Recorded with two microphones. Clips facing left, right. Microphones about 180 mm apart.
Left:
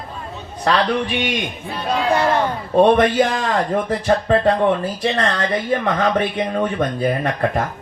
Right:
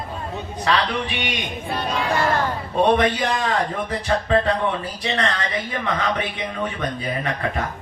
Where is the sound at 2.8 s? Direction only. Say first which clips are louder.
Left 5 dB; 50° left (ahead or behind).